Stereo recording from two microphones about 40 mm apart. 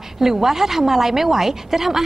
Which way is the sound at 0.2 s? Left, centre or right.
Centre.